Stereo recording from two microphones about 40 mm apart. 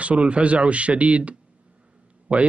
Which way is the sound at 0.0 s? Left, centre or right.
Right.